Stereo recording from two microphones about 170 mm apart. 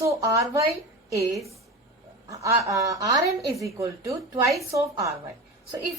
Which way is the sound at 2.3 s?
20° right (ahead or behind).